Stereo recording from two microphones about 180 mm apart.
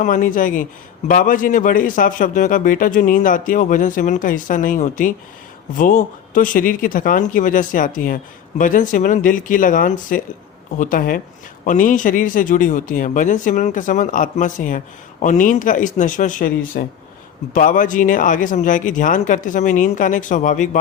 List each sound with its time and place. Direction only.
0.0 s speech: 45° left (ahead or behind)